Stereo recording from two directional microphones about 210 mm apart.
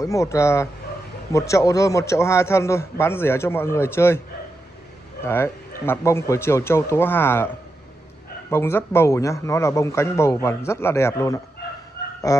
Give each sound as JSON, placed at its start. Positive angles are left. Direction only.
{"t": 0.0, "sound": "a man's voice", "side_deg": 15}
{"t": 5.2, "sound": "a man's voice", "side_deg": 10}